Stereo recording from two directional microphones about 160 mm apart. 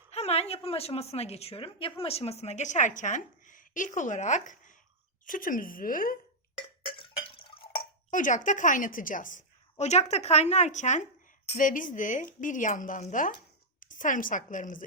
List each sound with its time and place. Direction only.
0.1 s a woman's voice: 40° left (ahead or behind); by 6.1 s 60° left (ahead or behind)
6.6 s cowbell: 30° left (ahead or behind)
8.1 s a woman's voice: 55° left (ahead or behind)